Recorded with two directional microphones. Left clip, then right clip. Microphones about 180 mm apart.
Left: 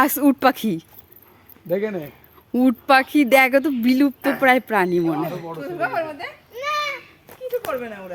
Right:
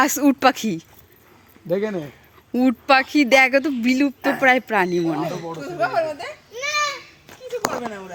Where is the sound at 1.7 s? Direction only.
50° right (ahead or behind).